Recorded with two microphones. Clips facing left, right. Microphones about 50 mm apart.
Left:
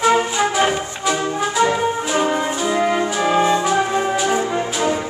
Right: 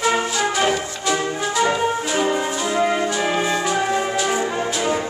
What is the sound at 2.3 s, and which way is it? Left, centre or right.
Music, left.